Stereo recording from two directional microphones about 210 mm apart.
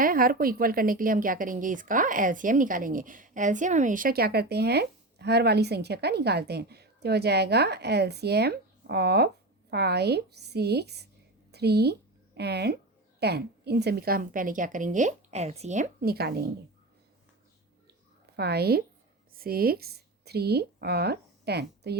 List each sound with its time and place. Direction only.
0.0 s a woman's voice: 45° right (ahead or behind)
18.3 s a woman's voice: 50° right (ahead or behind)